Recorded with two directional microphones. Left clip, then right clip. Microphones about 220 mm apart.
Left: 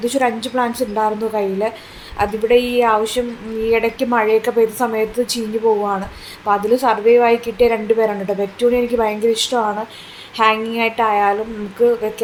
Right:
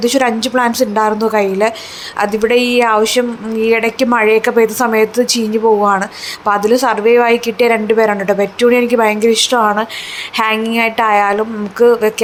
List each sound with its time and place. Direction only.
0.0 s a woman's voice: 15° right (ahead or behind)
9.6 s speech: 25° right (ahead or behind)
10.3 s a woman's voice: 15° right (ahead or behind)